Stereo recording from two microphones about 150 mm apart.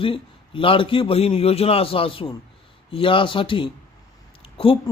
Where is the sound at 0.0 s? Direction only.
35° left (ahead or behind).